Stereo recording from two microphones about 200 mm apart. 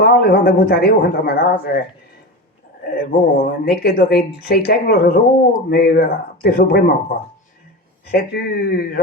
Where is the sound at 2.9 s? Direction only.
50° left (ahead or behind).